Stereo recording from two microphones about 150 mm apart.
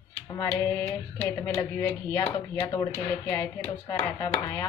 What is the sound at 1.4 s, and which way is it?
Speech, 20° left (ahead or behind).